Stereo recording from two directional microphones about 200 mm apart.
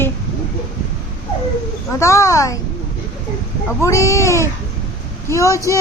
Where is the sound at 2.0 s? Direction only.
15° left (ahead or behind).